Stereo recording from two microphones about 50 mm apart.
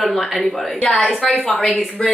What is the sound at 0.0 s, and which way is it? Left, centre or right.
A woman's voice, centre.